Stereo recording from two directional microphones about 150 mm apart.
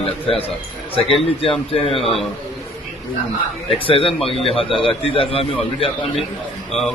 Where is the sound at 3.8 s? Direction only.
35° left (ahead or behind).